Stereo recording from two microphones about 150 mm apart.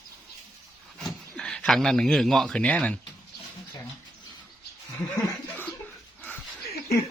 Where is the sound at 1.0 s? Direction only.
5° left (ahead or behind).